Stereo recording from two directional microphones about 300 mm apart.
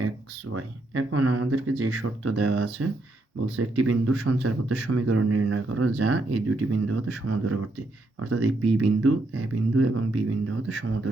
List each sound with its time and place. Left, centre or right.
0.5 s speech: right